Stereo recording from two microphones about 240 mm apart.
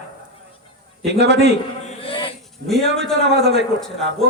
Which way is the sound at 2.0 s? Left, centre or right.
Left.